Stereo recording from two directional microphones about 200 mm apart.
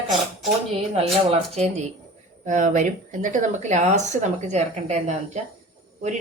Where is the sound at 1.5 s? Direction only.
35° right (ahead or behind).